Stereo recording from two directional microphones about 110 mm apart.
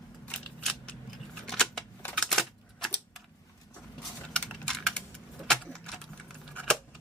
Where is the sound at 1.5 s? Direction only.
5° left (ahead or behind).